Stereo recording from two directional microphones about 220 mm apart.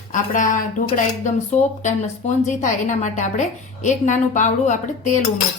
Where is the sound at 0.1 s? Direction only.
35° left (ahead or behind).